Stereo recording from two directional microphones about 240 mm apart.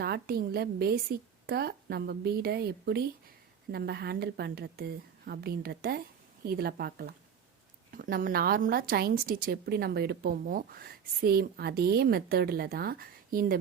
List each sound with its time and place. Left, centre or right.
0.0 s a woman's voice: right